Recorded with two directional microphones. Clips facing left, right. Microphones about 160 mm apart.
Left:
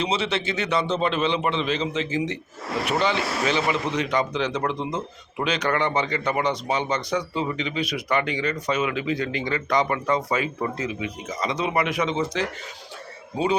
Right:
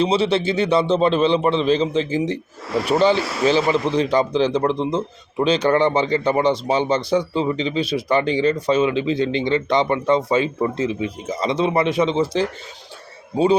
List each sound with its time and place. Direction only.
0.0 s speech: 30° right (ahead or behind)